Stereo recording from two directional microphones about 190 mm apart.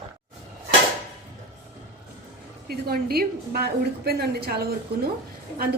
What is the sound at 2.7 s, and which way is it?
A woman's voice, 55° right (ahead or behind).